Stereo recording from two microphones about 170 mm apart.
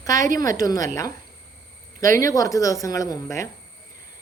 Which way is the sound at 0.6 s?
20° left (ahead or behind).